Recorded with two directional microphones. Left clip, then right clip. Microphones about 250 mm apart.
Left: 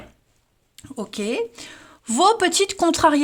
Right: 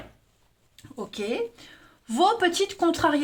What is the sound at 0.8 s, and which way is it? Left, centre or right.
Speech, left.